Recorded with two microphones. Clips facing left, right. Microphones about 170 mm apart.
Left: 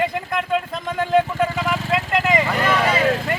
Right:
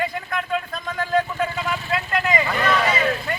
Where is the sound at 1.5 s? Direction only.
90° left.